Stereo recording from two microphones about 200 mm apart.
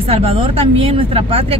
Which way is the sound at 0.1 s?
30° right (ahead or behind).